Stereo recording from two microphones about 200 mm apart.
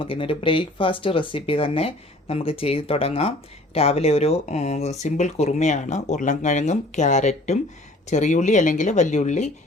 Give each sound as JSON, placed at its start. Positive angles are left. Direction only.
{"t": 0.0, "sound": "speech", "side_deg": 25}